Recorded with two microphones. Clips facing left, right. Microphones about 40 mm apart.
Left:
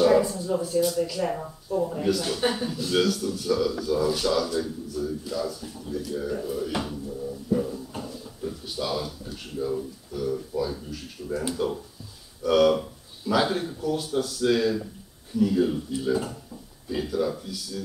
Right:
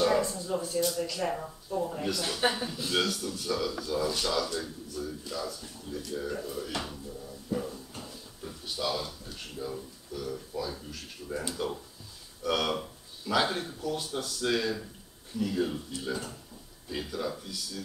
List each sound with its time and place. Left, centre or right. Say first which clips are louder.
0.0 s speech: left 7 dB; centre
7.5 s a sound: left 7 dB; centre
10.1 s speech: left 8 dB; centre
16.9 s speech: left 7 dB; centre